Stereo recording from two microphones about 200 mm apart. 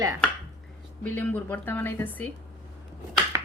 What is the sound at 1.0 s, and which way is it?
Speech, 10° left (ahead or behind).